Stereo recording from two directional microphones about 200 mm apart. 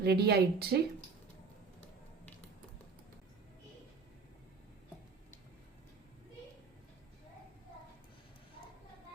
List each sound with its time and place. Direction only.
0.0 s a woman's voice: 55° right (ahead or behind)